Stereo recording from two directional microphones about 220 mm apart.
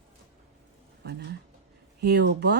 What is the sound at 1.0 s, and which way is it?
Speech, 50° right (ahead or behind).